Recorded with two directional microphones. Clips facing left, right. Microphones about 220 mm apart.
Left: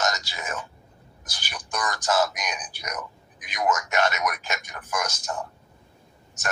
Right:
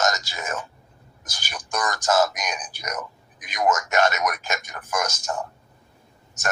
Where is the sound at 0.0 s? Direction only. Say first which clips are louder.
Right 3 dB; 45° right (ahead or behind).